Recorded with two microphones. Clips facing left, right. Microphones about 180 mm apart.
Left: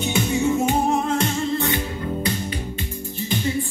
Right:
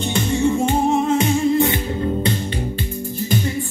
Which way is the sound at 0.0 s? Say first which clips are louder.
Right 2 dB; 5° left (ahead or behind).